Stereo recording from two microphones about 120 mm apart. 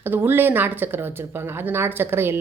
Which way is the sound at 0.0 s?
15° right (ahead or behind).